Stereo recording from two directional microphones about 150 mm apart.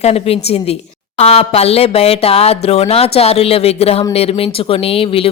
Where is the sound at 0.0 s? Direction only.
45° left (ahead or behind).